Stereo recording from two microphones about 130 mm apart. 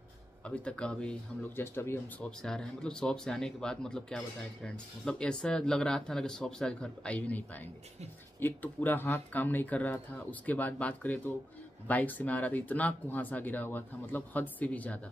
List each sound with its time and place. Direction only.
0.4 s speech: 10° left (ahead or behind)
1.6 s speech: 20° left (ahead or behind)
2.4 s speech: 5° left (ahead or behind)